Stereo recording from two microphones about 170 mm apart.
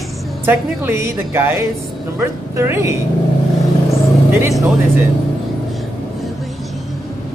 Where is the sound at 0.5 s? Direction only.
15° right (ahead or behind).